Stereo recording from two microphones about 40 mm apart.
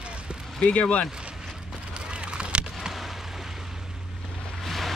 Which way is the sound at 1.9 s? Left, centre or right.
Right.